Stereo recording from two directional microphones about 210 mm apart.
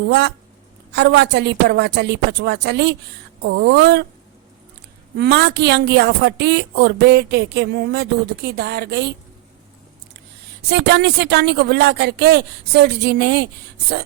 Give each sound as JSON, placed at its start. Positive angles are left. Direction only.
{"t": 0.1, "sound": "a woman's voice", "side_deg": -55}
{"t": 5.1, "sound": "a woman's voice", "side_deg": -50}
{"t": 10.7, "sound": "a woman's voice", "side_deg": -55}